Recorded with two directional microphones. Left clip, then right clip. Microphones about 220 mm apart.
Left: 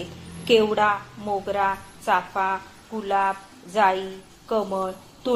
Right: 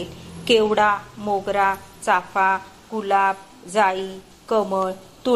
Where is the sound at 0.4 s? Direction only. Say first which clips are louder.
Right 2 dB; 25° right (ahead or behind).